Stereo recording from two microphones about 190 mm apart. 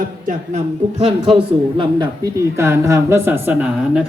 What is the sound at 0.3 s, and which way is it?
A man's voice, 35° right (ahead or behind).